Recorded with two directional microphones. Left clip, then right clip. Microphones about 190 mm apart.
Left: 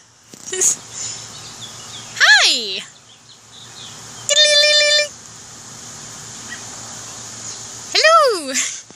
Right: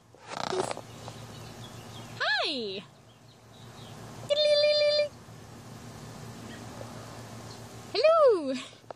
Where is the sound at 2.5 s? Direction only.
Centre (ahead or behind).